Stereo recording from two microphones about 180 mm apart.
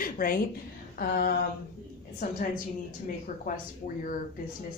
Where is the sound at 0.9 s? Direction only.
55° left (ahead or behind).